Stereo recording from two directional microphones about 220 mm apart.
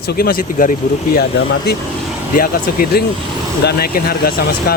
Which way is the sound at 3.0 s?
45° left (ahead or behind).